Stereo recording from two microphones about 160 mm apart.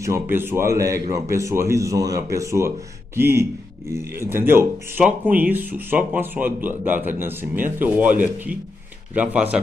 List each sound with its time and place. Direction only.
0.0 s speech: 15° right (ahead or behind)
9.1 s speech: 10° right (ahead or behind)